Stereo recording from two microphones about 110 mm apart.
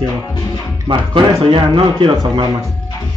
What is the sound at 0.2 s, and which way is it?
Music, 35° left (ahead or behind).